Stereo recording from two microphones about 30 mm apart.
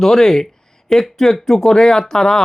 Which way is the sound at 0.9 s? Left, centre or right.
Left.